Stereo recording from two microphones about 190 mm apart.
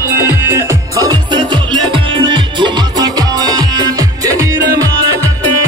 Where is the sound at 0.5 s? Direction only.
15° right (ahead or behind).